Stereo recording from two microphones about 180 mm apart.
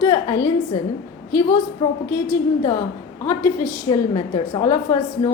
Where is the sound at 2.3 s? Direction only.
15° left (ahead or behind).